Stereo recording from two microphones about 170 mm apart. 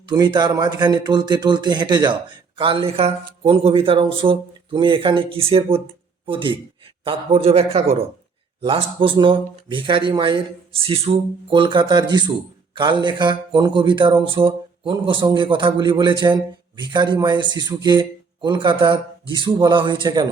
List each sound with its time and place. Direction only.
0.1 s speech: 25° right (ahead or behind)